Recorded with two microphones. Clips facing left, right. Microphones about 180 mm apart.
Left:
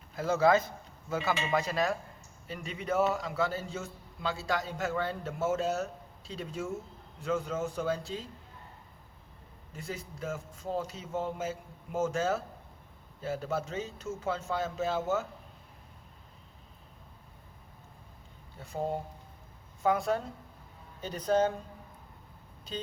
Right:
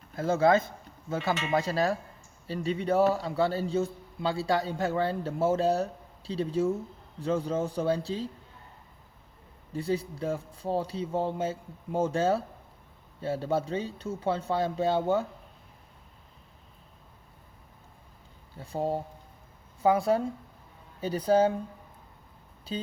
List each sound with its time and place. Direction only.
0.2 s cutlery: 25° right (ahead or behind)
2.5 s a man's voice: 30° right (ahead or behind)
9.7 s a man's voice: 30° right (ahead or behind)
18.6 s a man's voice: 30° right (ahead or behind)